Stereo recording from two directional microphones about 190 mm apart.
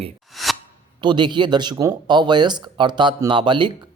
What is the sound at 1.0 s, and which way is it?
Speech, 25° right (ahead or behind).